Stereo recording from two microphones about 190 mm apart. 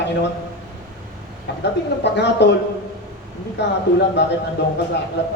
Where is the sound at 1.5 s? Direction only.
65° left (ahead or behind).